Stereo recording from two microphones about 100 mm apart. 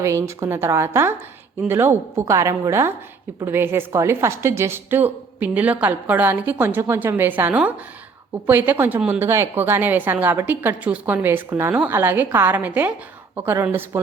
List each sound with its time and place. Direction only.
0.0 s a woman's voice: 30° right (ahead or behind); by 9.2 s 15° right (ahead or behind)
9.2 s a woman's voice: 25° right (ahead or behind)